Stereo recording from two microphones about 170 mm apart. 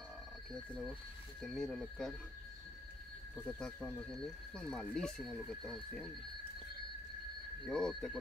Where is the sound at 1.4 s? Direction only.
Centre (ahead or behind).